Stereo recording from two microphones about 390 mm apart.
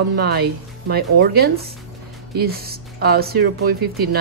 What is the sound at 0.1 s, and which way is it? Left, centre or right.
Speech, right.